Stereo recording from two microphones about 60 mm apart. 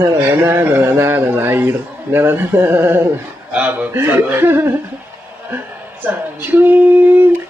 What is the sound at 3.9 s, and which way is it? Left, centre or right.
Speech, right.